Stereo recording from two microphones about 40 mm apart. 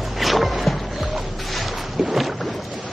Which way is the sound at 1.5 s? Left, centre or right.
Centre.